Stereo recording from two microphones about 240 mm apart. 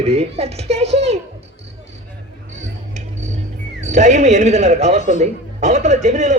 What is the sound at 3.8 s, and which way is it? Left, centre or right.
Speech, right.